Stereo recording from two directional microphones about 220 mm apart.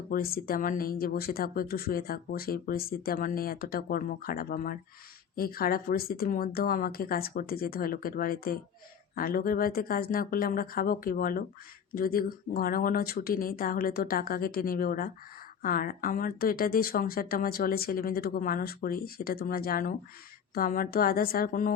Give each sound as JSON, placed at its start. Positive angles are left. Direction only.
{"t": 0.1, "sound": "speech", "side_deg": 40}